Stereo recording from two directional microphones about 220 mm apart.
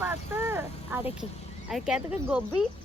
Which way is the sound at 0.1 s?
10° right (ahead or behind).